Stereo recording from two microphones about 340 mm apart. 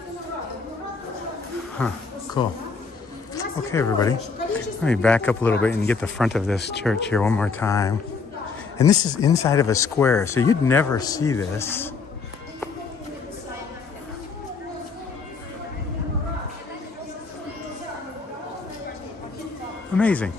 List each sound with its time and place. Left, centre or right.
1.8 s a man's voice: centre
6.6 s speech: left
7.2 s a man's voice: centre
20.0 s speech: centre